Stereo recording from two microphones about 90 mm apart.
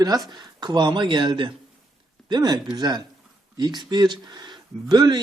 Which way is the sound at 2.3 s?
50° right (ahead or behind).